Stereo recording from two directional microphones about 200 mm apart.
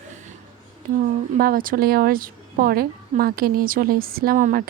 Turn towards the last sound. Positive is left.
turn(degrees=-45)  # may be behind; listen again after turning